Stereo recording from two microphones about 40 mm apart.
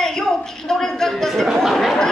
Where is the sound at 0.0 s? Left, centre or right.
Centre.